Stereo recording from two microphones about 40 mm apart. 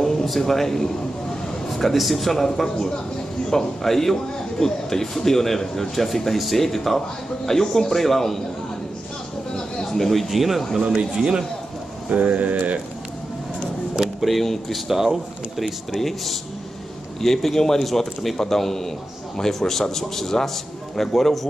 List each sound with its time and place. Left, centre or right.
0.0 s a man's voice: centre
9.5 s a sound: centre
10.2 s a man's voice: centre
11.1 s speech: centre
12.1 s speech: right
14.2 s a man's voice: centre
15.0 s speech: centre
15.6 s a man's voice: centre